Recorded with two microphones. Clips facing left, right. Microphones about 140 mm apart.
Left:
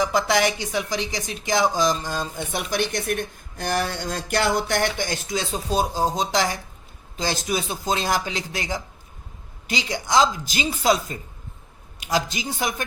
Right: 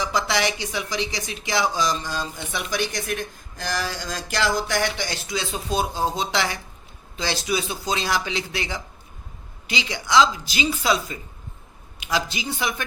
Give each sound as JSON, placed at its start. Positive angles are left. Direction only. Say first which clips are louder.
{"t": 0.0, "sound": "speech", "louder": "left 3 dB", "side_deg": 50}